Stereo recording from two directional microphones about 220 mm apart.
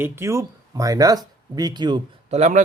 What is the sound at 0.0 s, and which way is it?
Speech, 10° right (ahead or behind).